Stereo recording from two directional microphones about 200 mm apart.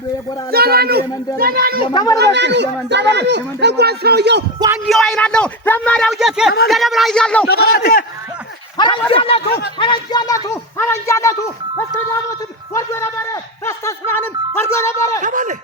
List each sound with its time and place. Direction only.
0.5 s speech: 50° right (ahead or behind)
1.9 s speech: 20° left (ahead or behind)
2.1 s speech: 60° right (ahead or behind)
4.9 s speech: centre (ahead or behind)
7.4 s a man's voice: 50° left (ahead or behind)
9.0 s speech: 25° left (ahead or behind)
15.2 s speech: 40° right (ahead or behind)